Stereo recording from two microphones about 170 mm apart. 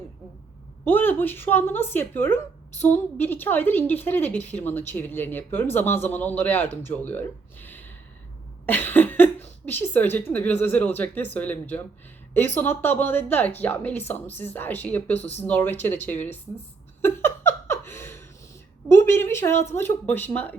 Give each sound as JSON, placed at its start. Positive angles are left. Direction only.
{"t": 0.9, "sound": "speech", "side_deg": 10}
{"t": 17.0, "sound": "laughter", "side_deg": 15}
{"t": 18.9, "sound": "speech", "side_deg": 15}